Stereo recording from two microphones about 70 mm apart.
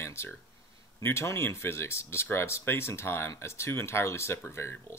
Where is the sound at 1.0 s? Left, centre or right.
Left.